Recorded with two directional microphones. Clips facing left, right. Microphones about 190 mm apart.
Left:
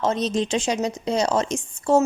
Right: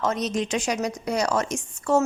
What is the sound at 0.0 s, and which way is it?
A woman's voice, 30° left (ahead or behind).